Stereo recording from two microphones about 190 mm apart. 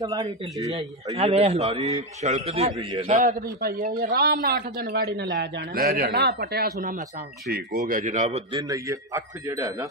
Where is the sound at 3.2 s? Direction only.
50° right (ahead or behind).